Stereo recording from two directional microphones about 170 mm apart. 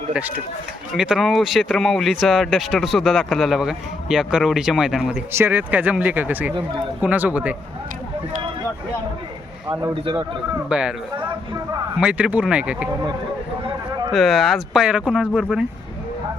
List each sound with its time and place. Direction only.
0.1 s speech: 10° right (ahead or behind)
10.0 s a man's voice: 30° right (ahead or behind)
10.7 s speech: 5° right (ahead or behind)
14.1 s speech: centre (ahead or behind)